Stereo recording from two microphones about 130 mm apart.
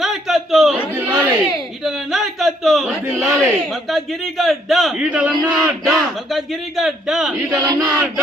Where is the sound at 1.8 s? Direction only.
Centre (ahead or behind).